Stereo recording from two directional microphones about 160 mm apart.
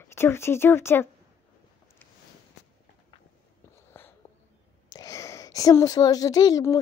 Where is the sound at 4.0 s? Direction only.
15° left (ahead or behind).